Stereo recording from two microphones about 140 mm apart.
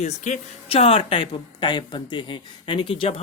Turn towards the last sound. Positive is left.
turn(degrees=40)  # may be behind; listen again after turning